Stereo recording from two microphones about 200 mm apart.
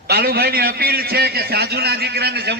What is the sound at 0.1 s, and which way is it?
A man's voice, 50° right (ahead or behind).